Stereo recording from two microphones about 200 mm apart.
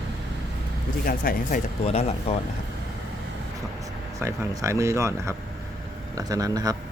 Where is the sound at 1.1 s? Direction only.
45° left (ahead or behind).